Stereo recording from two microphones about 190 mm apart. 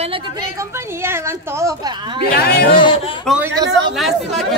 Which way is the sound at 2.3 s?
60° left (ahead or behind).